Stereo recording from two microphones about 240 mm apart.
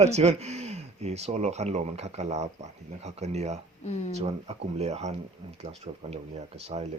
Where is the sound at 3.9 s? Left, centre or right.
Left.